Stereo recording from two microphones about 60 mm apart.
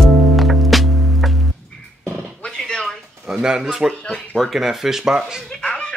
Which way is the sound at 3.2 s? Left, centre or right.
Centre.